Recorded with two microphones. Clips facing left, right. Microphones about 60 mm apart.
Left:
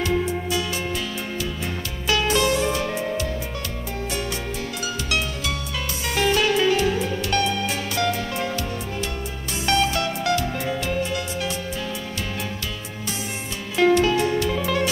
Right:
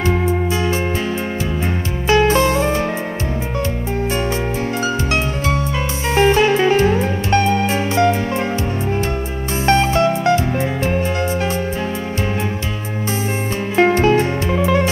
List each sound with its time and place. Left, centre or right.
0.0 s music: right
2.0 s music: right
4.8 s music: right
9.7 s music: right
13.7 s music: right